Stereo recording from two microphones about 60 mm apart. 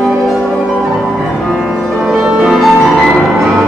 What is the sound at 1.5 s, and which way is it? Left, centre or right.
Music, centre.